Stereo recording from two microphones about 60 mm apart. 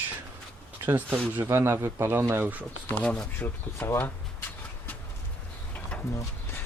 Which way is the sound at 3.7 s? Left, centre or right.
Left.